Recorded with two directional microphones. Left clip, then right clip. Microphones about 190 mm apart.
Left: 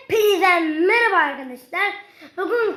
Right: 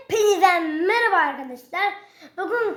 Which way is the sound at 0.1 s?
35° left (ahead or behind).